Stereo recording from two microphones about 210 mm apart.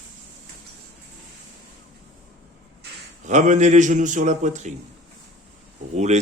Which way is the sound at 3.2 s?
35° right (ahead or behind).